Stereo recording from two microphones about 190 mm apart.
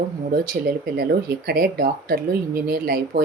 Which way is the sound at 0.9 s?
55° right (ahead or behind).